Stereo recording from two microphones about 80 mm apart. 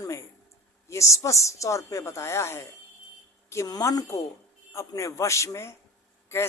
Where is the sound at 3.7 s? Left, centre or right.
Left.